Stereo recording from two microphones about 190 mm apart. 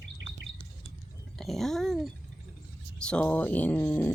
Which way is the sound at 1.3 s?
Centre (ahead or behind).